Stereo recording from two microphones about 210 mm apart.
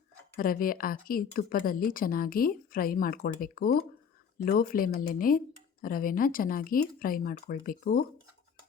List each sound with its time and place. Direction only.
0.3 s speech: 45° left (ahead or behind)